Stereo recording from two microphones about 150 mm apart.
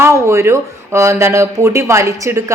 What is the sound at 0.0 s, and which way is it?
A woman's voice, 20° right (ahead or behind).